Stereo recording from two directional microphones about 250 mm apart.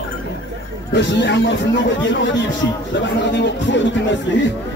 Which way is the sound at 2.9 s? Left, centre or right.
Left.